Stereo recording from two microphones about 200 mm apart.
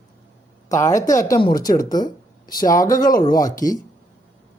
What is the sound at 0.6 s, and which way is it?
Speech, 15° left (ahead or behind).